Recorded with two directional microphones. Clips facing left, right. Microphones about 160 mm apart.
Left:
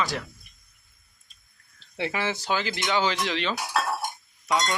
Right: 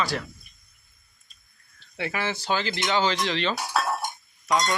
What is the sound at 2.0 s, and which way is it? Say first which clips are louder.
Speech: left 1 dB; 20° left (ahead or behind).